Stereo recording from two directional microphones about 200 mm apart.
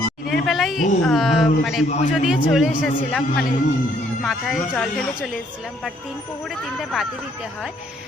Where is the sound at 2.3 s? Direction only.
5° right (ahead or behind).